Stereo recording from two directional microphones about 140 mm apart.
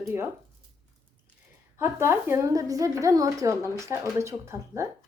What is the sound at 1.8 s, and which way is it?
Speech, 15° right (ahead or behind).